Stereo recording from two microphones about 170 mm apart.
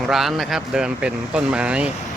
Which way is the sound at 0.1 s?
Centre (ahead or behind).